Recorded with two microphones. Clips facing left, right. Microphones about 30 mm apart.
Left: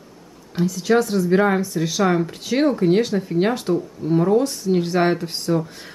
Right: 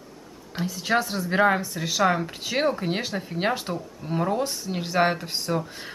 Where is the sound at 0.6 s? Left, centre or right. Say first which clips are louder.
Left 6 dB; centre.